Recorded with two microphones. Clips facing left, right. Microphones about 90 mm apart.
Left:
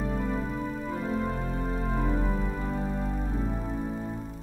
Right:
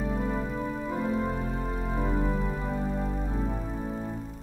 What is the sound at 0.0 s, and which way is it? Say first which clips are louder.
Music: even; 5° right (ahead or behind).